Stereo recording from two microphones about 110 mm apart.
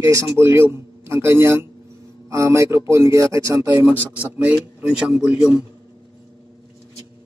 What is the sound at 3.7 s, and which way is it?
A man's voice, 15° right (ahead or behind).